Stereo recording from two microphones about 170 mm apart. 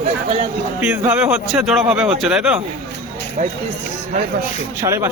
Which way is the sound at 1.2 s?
5° right (ahead or behind).